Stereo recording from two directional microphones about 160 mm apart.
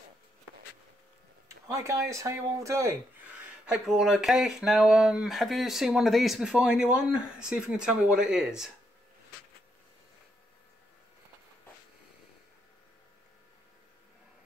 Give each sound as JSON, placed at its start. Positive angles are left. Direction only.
{"t": 1.7, "sound": "speech", "side_deg": -20}
{"t": 3.6, "sound": "speech", "side_deg": -5}